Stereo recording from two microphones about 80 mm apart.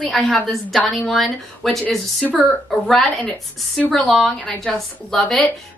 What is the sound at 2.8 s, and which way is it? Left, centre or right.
A woman's voice, centre.